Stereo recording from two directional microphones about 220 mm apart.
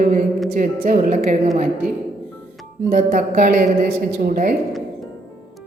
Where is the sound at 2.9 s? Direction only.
35° right (ahead or behind).